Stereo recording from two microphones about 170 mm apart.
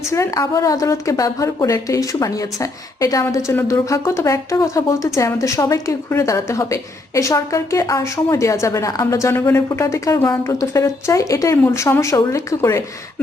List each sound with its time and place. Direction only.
0.1 s a woman's voice: 20° left (ahead or behind)